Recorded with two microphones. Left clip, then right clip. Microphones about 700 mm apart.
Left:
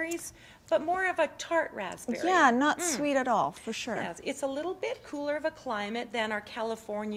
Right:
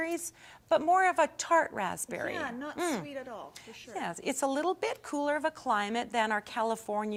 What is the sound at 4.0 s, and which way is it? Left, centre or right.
A woman's voice, right.